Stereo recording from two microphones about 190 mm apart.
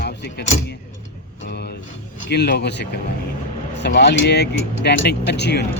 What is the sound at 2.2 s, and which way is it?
Speech, 60° left (ahead or behind).